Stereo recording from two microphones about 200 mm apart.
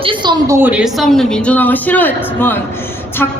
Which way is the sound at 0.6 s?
5° right (ahead or behind).